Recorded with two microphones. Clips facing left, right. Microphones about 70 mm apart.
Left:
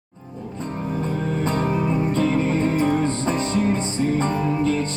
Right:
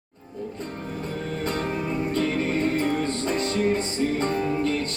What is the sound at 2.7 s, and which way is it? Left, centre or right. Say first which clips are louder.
Music: left 4 dB; left.